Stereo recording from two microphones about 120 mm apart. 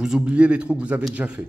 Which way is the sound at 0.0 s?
5° right (ahead or behind).